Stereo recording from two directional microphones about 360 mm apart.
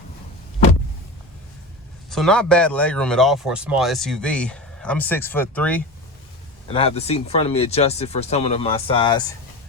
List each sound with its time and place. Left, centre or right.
2.0 s speech: centre
6.7 s speech: centre